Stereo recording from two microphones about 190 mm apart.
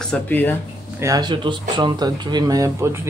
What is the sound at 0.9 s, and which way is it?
Speech, 20° right (ahead or behind).